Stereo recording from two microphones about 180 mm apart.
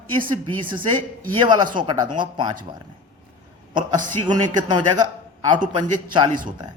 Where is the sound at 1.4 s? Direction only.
25° right (ahead or behind).